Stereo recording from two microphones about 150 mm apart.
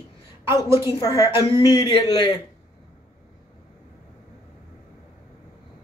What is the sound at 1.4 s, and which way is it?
Speech, 35° left (ahead or behind).